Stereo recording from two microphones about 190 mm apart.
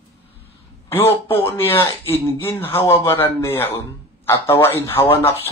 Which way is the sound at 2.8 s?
15° left (ahead or behind).